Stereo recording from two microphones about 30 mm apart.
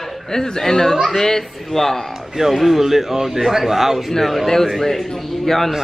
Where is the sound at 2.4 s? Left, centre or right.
Centre.